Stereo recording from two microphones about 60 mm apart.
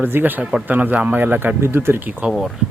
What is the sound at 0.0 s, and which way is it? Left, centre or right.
Speech, right.